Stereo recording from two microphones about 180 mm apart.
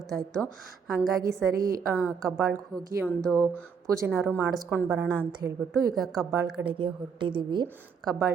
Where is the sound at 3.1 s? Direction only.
5° left (ahead or behind).